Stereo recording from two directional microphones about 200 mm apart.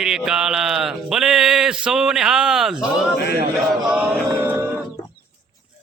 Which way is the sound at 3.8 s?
5° right (ahead or behind).